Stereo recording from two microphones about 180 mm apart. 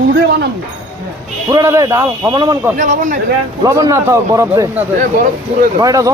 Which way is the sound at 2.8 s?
45° right (ahead or behind).